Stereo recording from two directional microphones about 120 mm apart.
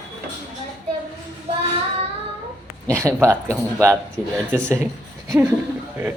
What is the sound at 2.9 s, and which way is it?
Speech, 20° right (ahead or behind).